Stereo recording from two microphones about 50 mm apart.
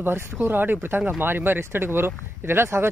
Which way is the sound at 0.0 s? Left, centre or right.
Right.